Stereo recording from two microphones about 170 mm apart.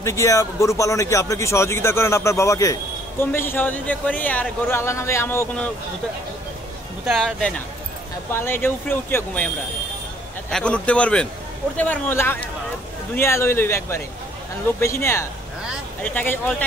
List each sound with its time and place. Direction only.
0.0 s speech: 15° left (ahead or behind)
7.1 s speech: centre (ahead or behind)
10.5 s speech: 5° left (ahead or behind)